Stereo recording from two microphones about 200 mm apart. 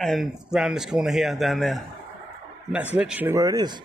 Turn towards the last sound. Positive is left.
turn(degrees=-20)  # may be behind; listen again after turning